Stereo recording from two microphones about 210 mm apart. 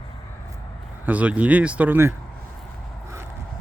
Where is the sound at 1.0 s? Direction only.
5° right (ahead or behind).